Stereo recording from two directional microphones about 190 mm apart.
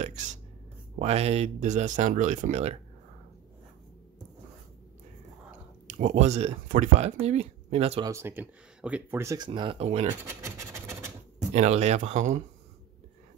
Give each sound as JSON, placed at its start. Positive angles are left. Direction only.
{"t": 0.0, "sound": "a sound", "side_deg": -40}
{"t": 0.9, "sound": "speech", "side_deg": -35}
{"t": 5.9, "sound": "speech", "side_deg": -40}
{"t": 8.0, "sound": "speech", "side_deg": -15}
{"t": 9.5, "sound": "speech", "side_deg": -25}
{"t": 10.2, "sound": "scratch", "side_deg": -15}
{"t": 11.5, "sound": "speech", "side_deg": -35}